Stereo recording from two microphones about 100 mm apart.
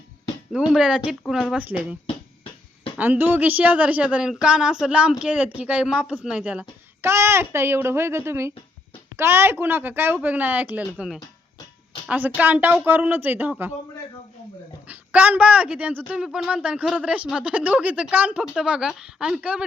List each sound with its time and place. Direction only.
0.7 s a woman's voice: 5° right (ahead or behind)
3.0 s speech: 20° right (ahead or behind)
7.0 s a woman's voice: 25° right (ahead or behind)
14.8 s speech: 15° right (ahead or behind)